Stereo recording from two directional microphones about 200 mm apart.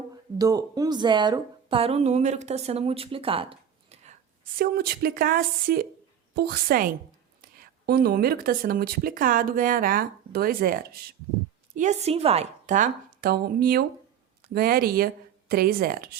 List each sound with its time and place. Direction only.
0.3 s speech: 15° right (ahead or behind); by 4.2 s 35° right (ahead or behind)
4.5 s speech: 50° right (ahead or behind)